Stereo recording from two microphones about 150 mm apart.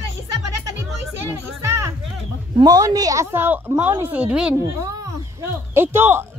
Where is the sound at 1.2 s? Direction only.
20° right (ahead or behind).